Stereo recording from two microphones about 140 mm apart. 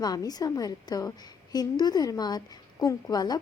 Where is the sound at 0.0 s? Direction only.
25° left (ahead or behind).